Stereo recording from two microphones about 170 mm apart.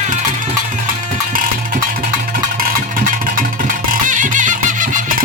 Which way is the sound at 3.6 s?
55° right (ahead or behind).